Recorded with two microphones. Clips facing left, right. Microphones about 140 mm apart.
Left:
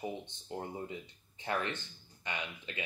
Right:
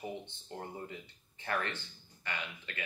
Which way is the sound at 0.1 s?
15° left (ahead or behind).